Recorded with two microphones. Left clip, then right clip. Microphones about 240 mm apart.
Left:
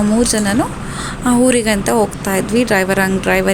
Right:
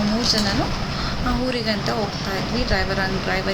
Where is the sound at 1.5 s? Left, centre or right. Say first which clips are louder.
Left 9 dB; left.